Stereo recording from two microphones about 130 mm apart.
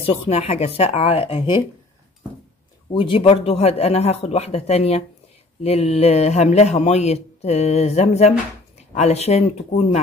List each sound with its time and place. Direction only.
0.0 s speech: 50° left (ahead or behind)
2.9 s speech: 40° left (ahead or behind); by 9.9 s 60° left (ahead or behind)